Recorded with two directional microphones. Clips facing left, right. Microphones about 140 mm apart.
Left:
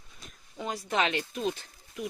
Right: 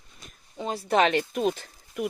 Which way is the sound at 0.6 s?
30° right (ahead or behind).